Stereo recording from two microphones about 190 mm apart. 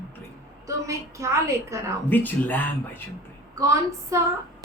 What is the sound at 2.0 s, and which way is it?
Speech, 10° left (ahead or behind).